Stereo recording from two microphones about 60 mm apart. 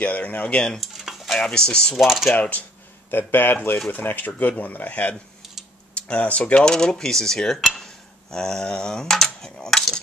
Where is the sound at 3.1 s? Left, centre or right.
Left.